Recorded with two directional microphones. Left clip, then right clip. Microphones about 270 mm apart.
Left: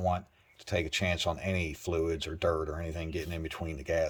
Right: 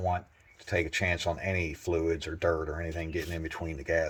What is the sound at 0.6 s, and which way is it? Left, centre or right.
Speech, centre.